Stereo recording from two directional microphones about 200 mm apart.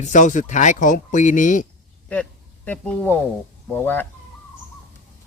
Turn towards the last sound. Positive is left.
turn(degrees=10)  # may be behind; listen again after turning